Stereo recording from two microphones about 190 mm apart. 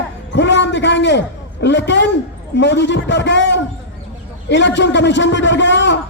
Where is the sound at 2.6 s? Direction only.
65° left (ahead or behind).